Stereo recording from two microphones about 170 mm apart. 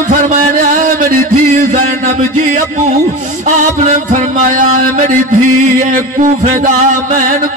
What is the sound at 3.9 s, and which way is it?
Music, 50° right (ahead or behind).